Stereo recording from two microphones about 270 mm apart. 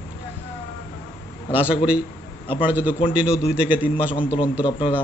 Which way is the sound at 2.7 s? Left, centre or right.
Centre.